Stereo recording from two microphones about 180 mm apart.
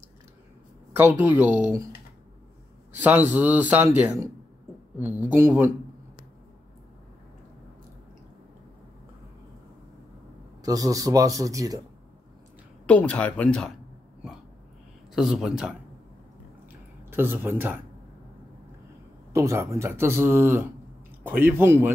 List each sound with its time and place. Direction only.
0.9 s speech: 10° right (ahead or behind)
3.0 s speech: 10° right (ahead or behind)
10.6 s speech: 20° right (ahead or behind)
12.8 s speech: 10° left (ahead or behind)
15.1 s speech: 5° right (ahead or behind)
17.1 s speech: 10° right (ahead or behind)
19.3 s speech: 15° right (ahead or behind)